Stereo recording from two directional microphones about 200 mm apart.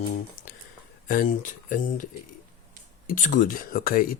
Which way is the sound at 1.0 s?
45° left (ahead or behind).